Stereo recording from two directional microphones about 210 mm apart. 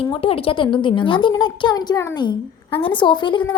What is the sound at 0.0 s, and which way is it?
A woman's voice, 25° left (ahead or behind).